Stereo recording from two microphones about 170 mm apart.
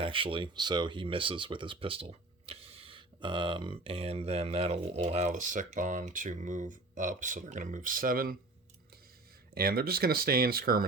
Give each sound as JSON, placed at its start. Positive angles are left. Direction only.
{"t": 0.0, "sound": "speech", "side_deg": -30}
{"t": 5.0, "sound": "speech", "side_deg": -45}
{"t": 9.6, "sound": "speech", "side_deg": -60}